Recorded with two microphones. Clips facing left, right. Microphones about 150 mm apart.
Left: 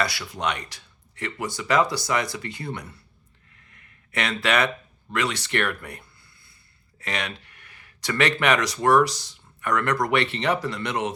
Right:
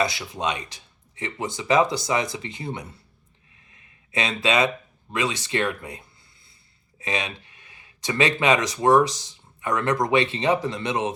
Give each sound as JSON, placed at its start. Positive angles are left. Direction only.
{"t": 0.0, "sound": "speech", "side_deg": -20}
{"t": 3.5, "sound": "a sound", "side_deg": -20}
{"t": 4.1, "sound": "speech", "side_deg": -20}